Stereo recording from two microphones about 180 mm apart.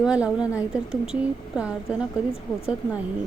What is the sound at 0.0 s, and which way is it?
A woman's voice, 5° right (ahead or behind).